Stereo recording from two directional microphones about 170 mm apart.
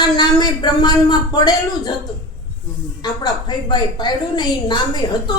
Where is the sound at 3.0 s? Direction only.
25° left (ahead or behind).